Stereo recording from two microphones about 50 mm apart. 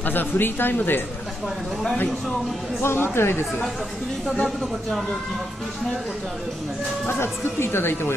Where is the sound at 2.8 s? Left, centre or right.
Left.